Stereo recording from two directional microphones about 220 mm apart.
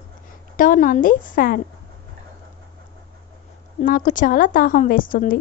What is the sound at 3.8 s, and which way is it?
A woman's voice, 35° left (ahead or behind).